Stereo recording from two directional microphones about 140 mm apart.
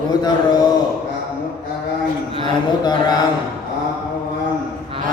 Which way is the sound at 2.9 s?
30° left (ahead or behind).